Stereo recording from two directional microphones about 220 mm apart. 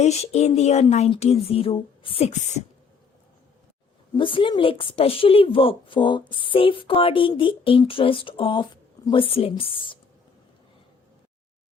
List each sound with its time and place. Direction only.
0.0 s a woman's voice: 30° left (ahead or behind)
4.2 s a woman's voice: 25° left (ahead or behind)